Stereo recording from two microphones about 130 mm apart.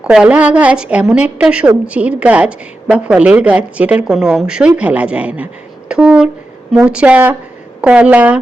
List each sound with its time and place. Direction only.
0.0 s a woman's voice: 5° right (ahead or behind)